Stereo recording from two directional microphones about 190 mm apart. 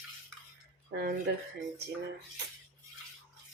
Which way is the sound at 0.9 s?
55° right (ahead or behind).